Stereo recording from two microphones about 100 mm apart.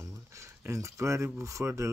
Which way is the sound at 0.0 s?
30° right (ahead or behind).